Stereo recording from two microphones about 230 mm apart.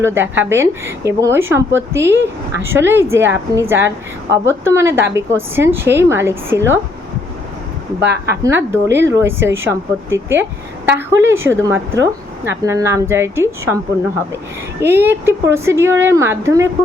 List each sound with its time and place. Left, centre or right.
0.0 s a woman's voice: centre
8.0 s a woman's voice: right
8.4 s a woman's voice: centre
14.8 s a woman's voice: centre